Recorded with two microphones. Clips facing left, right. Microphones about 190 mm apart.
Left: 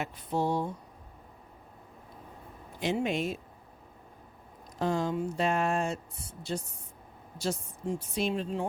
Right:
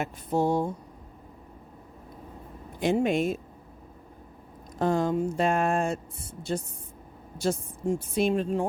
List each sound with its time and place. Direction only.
0.0 s a woman's voice: 45° right (ahead or behind)
2.8 s a woman's voice: 50° right (ahead or behind)
4.8 s a woman's voice: 50° right (ahead or behind)